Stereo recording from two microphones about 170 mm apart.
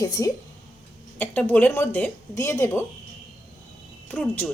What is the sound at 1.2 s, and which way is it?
A woman's voice, 10° left (ahead or behind).